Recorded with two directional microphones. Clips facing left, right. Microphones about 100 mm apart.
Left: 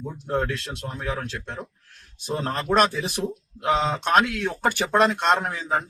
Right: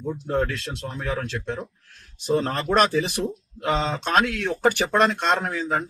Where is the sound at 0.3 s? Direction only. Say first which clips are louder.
Even; 10° left (ahead or behind).